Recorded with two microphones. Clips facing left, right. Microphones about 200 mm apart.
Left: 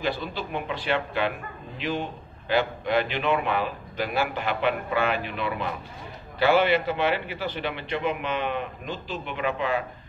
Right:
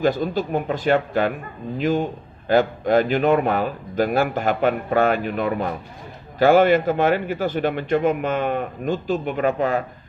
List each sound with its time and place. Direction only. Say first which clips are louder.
0.0 s a man's voice: right 9 dB; 45° right (ahead or behind)